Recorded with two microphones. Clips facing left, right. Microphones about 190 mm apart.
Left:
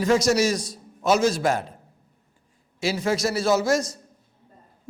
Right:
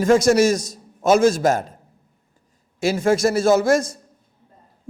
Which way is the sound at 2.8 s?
50° right (ahead or behind).